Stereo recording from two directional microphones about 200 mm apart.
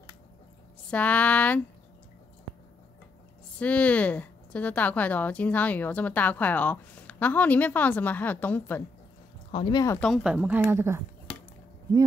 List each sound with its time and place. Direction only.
0.8 s a woman's voice: 5° left (ahead or behind)
3.5 s a woman's voice: 5° left (ahead or behind)
9.5 s speech: 25° left (ahead or behind)
9.9 s speech: centre (ahead or behind)